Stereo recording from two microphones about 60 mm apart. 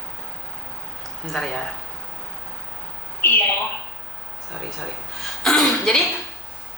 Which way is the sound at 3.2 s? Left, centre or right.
Left.